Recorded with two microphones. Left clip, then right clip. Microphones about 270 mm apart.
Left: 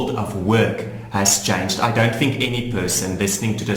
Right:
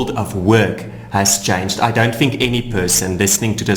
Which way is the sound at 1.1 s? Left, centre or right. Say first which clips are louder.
Right 3 dB; right.